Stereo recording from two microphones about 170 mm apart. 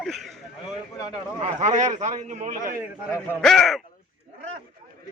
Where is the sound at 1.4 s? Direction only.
45° right (ahead or behind).